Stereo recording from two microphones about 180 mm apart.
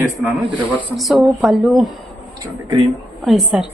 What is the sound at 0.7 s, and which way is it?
A woman's voice, 5° left (ahead or behind).